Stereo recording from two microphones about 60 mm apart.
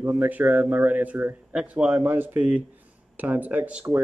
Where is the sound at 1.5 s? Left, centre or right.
Centre.